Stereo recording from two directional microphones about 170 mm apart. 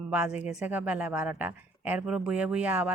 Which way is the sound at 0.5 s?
10° right (ahead or behind).